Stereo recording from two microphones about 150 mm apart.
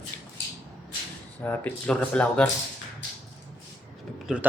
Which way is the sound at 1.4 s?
10° left (ahead or behind).